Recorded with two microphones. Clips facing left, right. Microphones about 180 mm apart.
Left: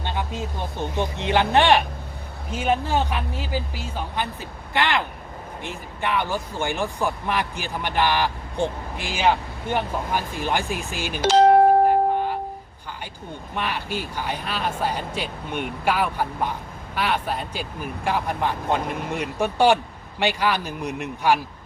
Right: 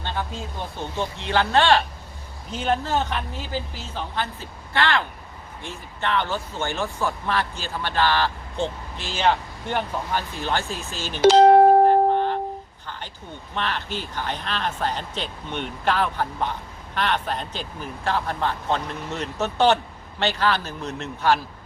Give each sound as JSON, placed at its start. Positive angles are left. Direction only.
{"t": 0.9, "sound": "speech", "side_deg": 20}
{"t": 11.9, "sound": "music", "side_deg": 10}
{"t": 13.6, "sound": "speech", "side_deg": 10}